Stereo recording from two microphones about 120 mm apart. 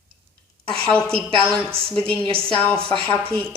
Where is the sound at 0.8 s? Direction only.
10° left (ahead or behind).